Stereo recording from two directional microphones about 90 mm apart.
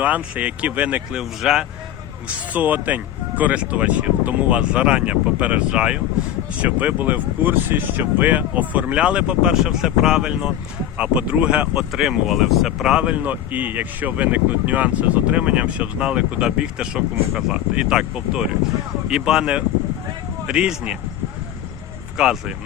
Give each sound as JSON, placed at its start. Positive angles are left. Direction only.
{"t": 0.0, "sound": "speech", "side_deg": -15}
{"t": 1.2, "sound": "speech", "side_deg": -5}
{"t": 2.2, "sound": "speech", "side_deg": -15}
{"t": 22.2, "sound": "speech", "side_deg": -10}